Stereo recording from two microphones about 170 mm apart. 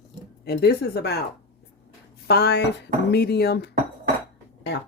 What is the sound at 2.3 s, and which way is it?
Speech, 75° left (ahead or behind).